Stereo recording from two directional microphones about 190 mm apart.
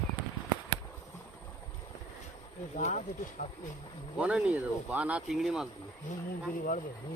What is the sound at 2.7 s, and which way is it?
Speech, 40° left (ahead or behind).